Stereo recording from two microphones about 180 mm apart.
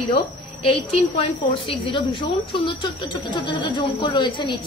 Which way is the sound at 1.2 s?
25° left (ahead or behind).